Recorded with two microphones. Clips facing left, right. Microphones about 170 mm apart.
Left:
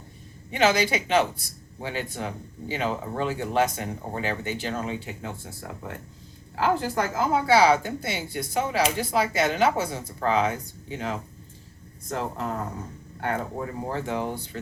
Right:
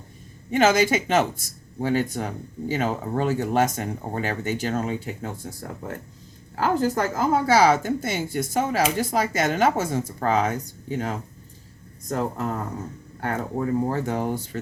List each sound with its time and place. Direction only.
0.5 s speech: 45° right (ahead or behind)